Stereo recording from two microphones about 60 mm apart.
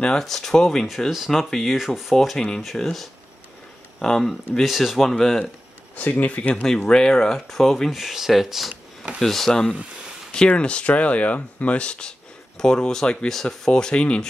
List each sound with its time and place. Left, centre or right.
0.2 s speech: centre
0.8 s speech: centre
5.9 s speech: left
6.5 s speech: centre
7.9 s speech: centre